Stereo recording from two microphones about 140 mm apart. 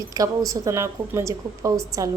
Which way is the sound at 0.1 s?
25° right (ahead or behind).